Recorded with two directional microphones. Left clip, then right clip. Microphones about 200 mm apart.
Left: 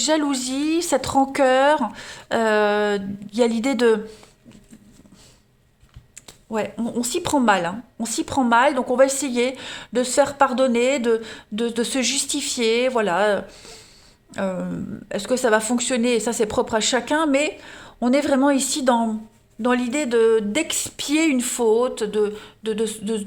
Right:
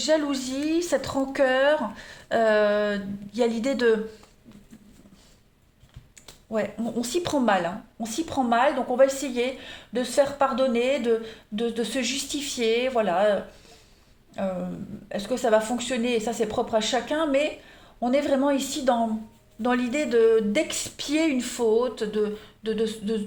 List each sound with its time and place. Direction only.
0.0 s a woman's voice: 40° left (ahead or behind)
6.5 s a woman's voice: 35° left (ahead or behind)